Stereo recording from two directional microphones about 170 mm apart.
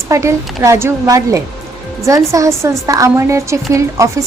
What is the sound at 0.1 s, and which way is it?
A woman's voice, 15° right (ahead or behind).